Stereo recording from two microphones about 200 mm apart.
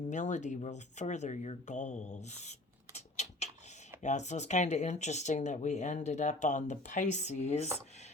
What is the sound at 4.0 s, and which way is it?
Speech, 35° left (ahead or behind).